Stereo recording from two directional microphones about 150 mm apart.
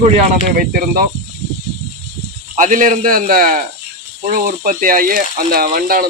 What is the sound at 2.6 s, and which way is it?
Speech, 60° right (ahead or behind).